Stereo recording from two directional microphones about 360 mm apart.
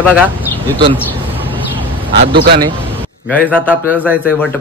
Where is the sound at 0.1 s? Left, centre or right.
Centre.